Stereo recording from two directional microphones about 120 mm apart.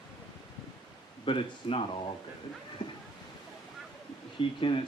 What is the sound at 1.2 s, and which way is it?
Speech, 45° left (ahead or behind).